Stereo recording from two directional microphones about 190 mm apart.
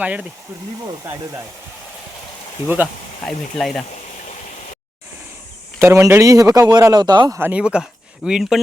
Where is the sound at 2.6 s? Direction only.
10° right (ahead or behind).